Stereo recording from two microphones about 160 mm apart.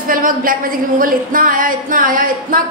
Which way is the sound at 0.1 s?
60° right (ahead or behind).